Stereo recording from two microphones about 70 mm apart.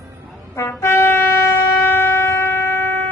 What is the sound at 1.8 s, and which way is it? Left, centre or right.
Shofar, left.